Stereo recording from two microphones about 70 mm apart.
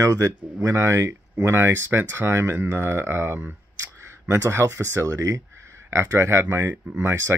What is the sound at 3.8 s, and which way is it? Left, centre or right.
Speech, right.